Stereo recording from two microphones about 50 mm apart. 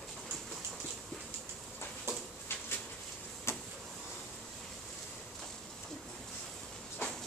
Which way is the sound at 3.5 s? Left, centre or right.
Left.